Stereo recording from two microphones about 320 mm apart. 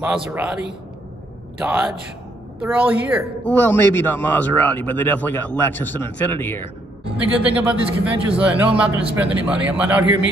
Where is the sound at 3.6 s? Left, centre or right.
Centre.